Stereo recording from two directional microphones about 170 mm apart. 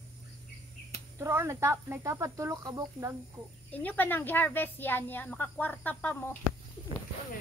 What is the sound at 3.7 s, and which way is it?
Speech, 10° left (ahead or behind).